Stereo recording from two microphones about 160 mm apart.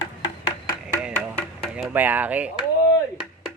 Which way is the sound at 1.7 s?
10° right (ahead or behind).